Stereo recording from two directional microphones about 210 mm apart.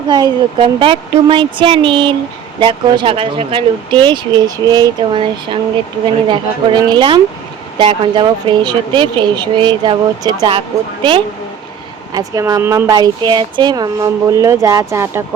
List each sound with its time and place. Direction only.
0.1 s speech: 20° right (ahead or behind)
12.1 s speech: 15° right (ahead or behind)